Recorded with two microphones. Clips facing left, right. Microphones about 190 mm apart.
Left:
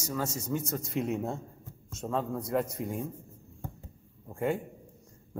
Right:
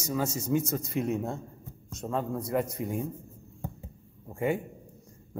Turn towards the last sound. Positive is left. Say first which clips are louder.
# right 2 dB
turn(degrees=-5)  # may be behind; listen again after turning